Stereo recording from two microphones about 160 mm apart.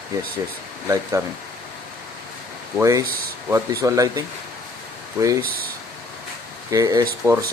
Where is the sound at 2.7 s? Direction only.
20° right (ahead or behind).